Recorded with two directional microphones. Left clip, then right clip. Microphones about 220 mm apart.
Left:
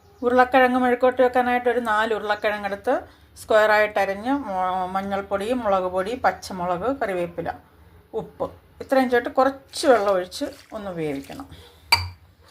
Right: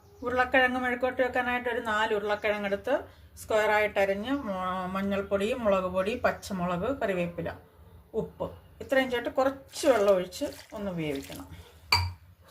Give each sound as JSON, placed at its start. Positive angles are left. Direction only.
{"t": 0.3, "sound": "a woman's voice", "side_deg": 30}
{"t": 8.9, "sound": "a woman's voice", "side_deg": 25}